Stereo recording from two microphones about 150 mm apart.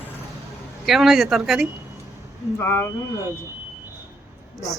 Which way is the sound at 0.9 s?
Centre (ahead or behind).